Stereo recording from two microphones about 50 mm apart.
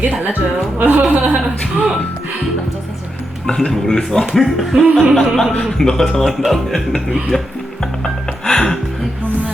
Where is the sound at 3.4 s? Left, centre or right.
Centre.